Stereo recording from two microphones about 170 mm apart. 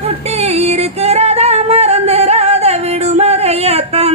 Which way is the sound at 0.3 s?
40° right (ahead or behind).